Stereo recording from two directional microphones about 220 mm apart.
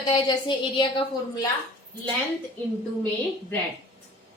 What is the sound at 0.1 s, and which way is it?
A woman's voice, 20° left (ahead or behind).